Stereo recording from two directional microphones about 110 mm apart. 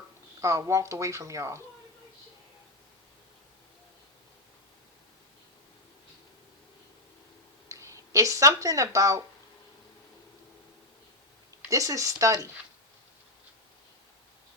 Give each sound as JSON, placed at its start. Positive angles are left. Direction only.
{"t": 0.4, "sound": "speech", "side_deg": -25}
{"t": 7.7, "sound": "a sound", "side_deg": -25}
{"t": 11.7, "sound": "speech", "side_deg": -30}